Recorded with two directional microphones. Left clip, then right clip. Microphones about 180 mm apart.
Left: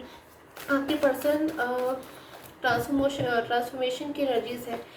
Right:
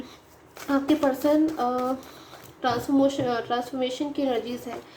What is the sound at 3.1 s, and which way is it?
A woman's voice, 40° right (ahead or behind).